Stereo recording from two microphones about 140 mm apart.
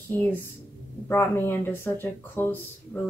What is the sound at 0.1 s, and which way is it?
Speech, 15° left (ahead or behind).